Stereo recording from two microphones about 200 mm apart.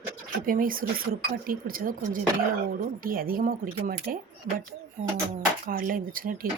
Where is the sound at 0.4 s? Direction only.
45° right (ahead or behind).